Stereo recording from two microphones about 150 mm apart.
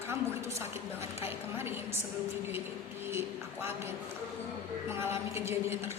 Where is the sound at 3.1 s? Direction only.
15° right (ahead or behind).